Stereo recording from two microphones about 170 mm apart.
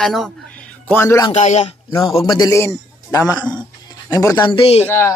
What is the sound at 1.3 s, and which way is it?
Speech, 40° left (ahead or behind).